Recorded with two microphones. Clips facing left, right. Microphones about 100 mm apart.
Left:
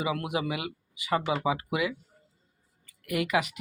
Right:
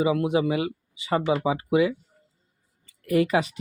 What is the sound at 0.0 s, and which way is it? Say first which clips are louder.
Speech: right 8 dB; 30° right (ahead or behind).